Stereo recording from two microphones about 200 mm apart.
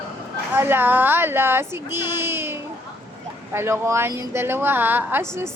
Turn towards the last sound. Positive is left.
turn(degrees=-10)  # may be behind; listen again after turning